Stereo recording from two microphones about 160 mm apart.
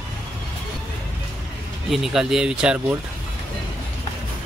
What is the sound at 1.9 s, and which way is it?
Speech, 5° right (ahead or behind).